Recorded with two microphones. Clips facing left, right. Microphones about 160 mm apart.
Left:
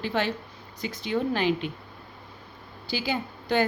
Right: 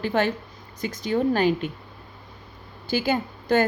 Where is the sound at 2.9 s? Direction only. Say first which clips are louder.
Right 6 dB; 50° right (ahead or behind).